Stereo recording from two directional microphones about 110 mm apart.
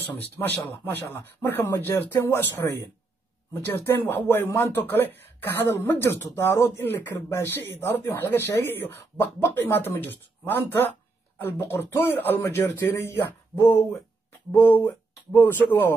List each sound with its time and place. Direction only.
0.0 s speech: 20° left (ahead or behind)